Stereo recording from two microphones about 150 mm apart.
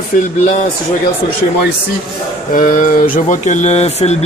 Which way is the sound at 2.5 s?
65° left (ahead or behind).